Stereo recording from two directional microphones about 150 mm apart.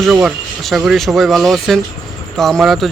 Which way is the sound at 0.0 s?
5° right (ahead or behind).